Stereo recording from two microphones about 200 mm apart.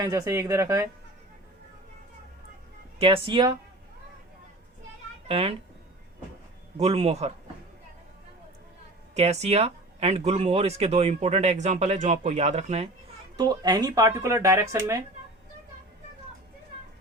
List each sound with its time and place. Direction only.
0.0 s speech: 15° right (ahead or behind)
3.0 s speech: 25° right (ahead or behind)
5.3 s speech: 30° right (ahead or behind)
6.7 s speech: 30° right (ahead or behind)
9.1 s speech: 35° right (ahead or behind)
13.3 s speech: 20° right (ahead or behind)